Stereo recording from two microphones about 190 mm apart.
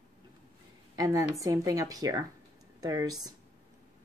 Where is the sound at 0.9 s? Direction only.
15° right (ahead or behind).